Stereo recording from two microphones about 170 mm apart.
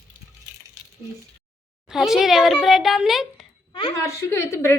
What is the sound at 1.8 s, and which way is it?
A woman's voice, centre (ahead or behind).